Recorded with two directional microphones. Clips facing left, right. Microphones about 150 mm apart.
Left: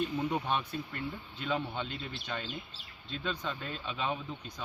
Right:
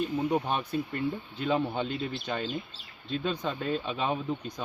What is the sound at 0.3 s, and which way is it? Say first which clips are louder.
Speech: right 4 dB; 40° right (ahead or behind).